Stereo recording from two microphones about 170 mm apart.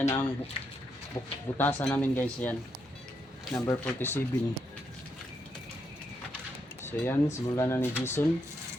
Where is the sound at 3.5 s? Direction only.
20° left (ahead or behind).